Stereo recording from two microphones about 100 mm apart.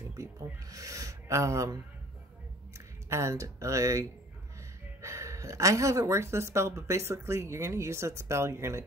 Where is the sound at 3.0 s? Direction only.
30° right (ahead or behind).